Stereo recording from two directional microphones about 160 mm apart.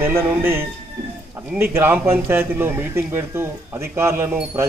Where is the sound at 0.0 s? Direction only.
15° right (ahead or behind).